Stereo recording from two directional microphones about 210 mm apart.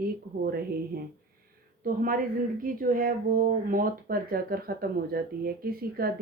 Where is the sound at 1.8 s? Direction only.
40° right (ahead or behind).